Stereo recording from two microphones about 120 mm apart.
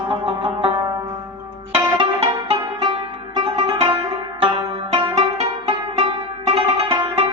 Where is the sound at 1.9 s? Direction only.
45° right (ahead or behind).